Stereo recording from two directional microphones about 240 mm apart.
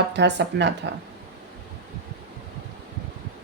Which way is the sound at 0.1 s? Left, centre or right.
Right.